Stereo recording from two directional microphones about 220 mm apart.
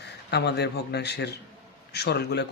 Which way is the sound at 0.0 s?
50° left (ahead or behind).